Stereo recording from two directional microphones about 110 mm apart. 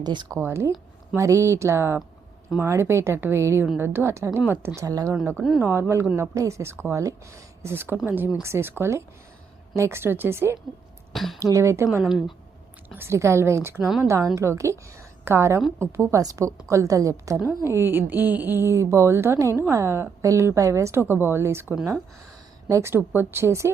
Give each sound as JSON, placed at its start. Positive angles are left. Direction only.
{"t": 0.0, "sound": "speech", "side_deg": -40}
{"t": 0.3, "sound": "a woman's voice", "side_deg": -25}
{"t": 5.4, "sound": "speech", "side_deg": 0}
{"t": 5.6, "sound": "a woman's voice", "side_deg": -25}
{"t": 11.1, "sound": "a woman's voice", "side_deg": 0}
{"t": 11.3, "sound": "a woman's voice", "side_deg": -30}
{"t": 12.0, "sound": "speech", "side_deg": -5}
{"t": 12.9, "sound": "a woman's voice", "side_deg": -25}